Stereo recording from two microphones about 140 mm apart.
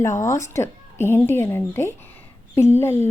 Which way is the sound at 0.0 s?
20° left (ahead or behind).